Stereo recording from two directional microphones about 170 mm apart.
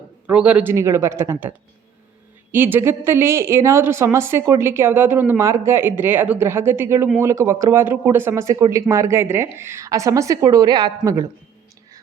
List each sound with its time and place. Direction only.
0.3 s a woman's voice: 5° right (ahead or behind)